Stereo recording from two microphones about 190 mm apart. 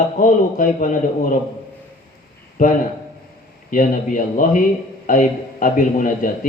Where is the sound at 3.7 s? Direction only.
45° left (ahead or behind).